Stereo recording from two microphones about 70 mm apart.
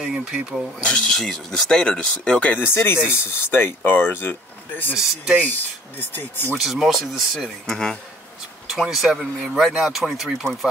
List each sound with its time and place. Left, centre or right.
0.0 s speech: centre
1.1 s speech: centre
1.8 s speech: centre
6.6 s speech: centre
7.6 s speech: centre
8.6 s speech: centre
10.4 s speech: centre